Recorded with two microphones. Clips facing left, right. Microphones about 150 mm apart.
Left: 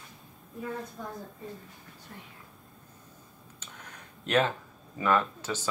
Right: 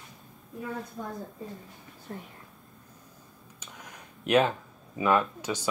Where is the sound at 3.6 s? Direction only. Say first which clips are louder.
Right 2 dB; 15° right (ahead or behind).